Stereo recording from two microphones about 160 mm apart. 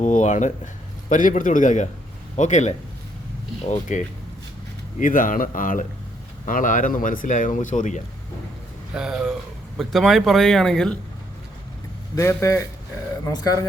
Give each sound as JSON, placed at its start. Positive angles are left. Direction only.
{"t": 0.0, "sound": "speech", "side_deg": 50}
{"t": 9.0, "sound": "speech", "side_deg": -5}
{"t": 12.1, "sound": "speech", "side_deg": 20}